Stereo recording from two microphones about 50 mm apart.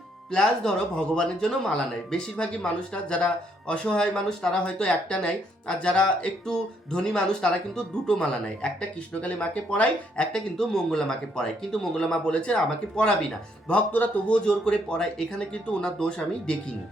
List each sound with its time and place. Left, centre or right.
0.3 s speech: centre
9.2 s speech: left
10.6 s speech: centre
13.7 s speech: left